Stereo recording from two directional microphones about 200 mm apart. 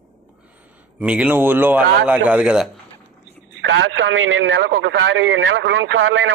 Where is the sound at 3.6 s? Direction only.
70° right (ahead or behind).